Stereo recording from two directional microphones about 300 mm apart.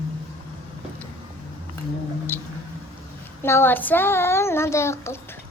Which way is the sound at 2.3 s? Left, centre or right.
Centre.